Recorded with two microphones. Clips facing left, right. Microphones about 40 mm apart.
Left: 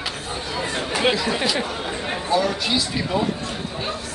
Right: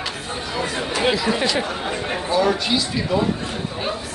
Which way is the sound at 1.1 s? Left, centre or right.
Centre.